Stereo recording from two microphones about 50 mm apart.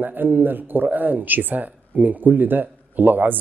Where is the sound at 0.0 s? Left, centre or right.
Right.